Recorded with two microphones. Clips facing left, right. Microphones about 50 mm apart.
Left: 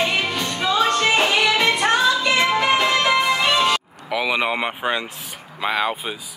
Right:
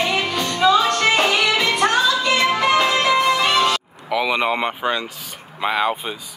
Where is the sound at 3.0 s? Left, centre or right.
Left.